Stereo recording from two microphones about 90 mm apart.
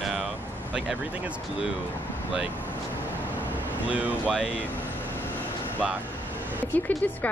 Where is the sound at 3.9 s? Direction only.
15° right (ahead or behind).